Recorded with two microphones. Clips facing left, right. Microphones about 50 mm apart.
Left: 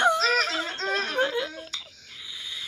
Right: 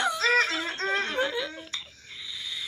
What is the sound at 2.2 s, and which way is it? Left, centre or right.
Owl, left.